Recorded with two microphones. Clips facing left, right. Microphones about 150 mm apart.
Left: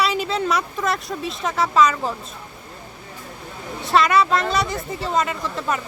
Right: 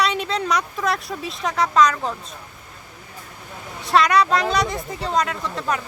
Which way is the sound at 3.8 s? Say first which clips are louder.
Even; centre (ahead or behind).